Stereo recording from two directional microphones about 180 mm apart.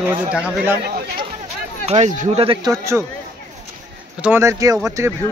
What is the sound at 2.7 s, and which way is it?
Speech, 15° right (ahead or behind).